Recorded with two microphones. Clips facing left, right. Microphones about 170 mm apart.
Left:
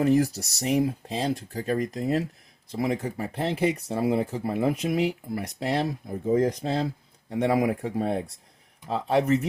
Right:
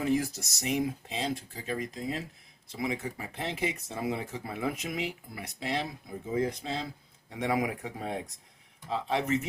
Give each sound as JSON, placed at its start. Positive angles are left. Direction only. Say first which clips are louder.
{"t": 0.0, "sound": "speech", "louder": "left 7 dB", "side_deg": 40}
{"t": 8.9, "sound": "speech", "louder": "left 7 dB", "side_deg": 50}